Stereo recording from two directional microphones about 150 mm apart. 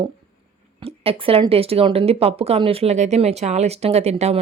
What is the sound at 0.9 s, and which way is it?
Speech, 40° right (ahead or behind).